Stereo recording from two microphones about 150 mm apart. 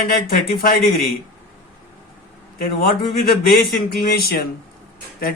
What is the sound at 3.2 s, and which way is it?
Speech, 90° left.